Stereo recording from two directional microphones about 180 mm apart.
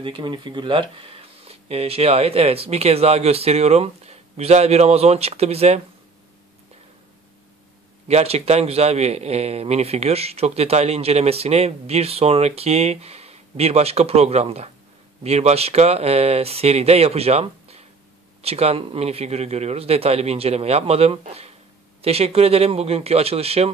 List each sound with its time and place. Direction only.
0.0 s a man's voice: 25° right (ahead or behind)
8.1 s a man's voice: 35° right (ahead or behind)